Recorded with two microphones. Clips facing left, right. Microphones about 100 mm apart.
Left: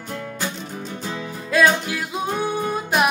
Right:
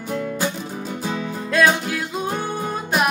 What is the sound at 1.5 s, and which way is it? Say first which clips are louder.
Music: even; centre (ahead or behind).